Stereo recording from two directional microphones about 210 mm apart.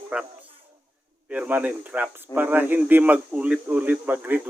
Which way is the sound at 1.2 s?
5° right (ahead or behind).